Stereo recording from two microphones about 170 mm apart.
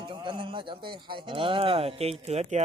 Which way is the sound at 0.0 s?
30° right (ahead or behind).